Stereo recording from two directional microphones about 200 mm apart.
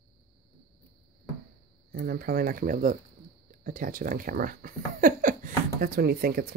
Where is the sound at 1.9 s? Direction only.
50° right (ahead or behind).